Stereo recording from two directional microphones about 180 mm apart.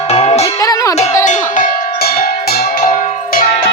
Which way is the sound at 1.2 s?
45° left (ahead or behind).